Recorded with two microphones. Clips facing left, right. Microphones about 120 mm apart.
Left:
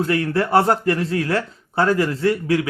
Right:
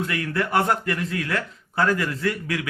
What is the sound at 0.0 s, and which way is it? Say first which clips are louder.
Speech: left 6 dB; 30° left (ahead or behind).